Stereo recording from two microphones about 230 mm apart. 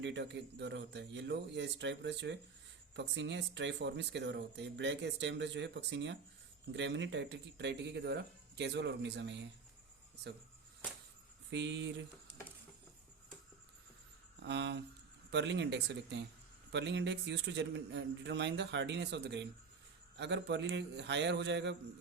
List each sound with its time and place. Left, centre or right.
0.0 s speech: right
11.5 s speech: right
14.4 s speech: right